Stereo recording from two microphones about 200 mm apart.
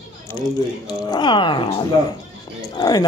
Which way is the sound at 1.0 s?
25° left (ahead or behind).